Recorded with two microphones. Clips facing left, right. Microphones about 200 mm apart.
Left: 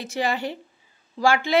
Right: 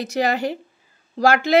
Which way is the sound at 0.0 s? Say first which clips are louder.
Right 4 dB; 40° right (ahead or behind).